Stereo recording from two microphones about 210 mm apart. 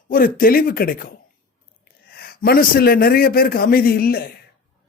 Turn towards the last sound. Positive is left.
turn(degrees=45)  # may be behind; listen again after turning